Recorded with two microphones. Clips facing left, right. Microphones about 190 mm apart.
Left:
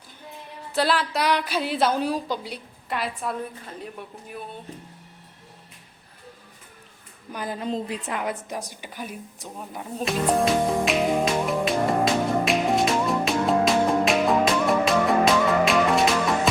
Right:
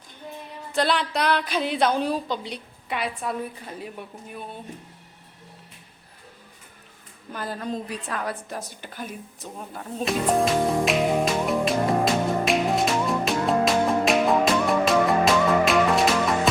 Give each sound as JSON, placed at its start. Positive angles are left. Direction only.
{"t": 0.7, "sound": "a woman's voice", "side_deg": 5}
{"t": 7.3, "sound": "a woman's voice", "side_deg": 15}
{"t": 10.0, "sound": "music", "side_deg": 0}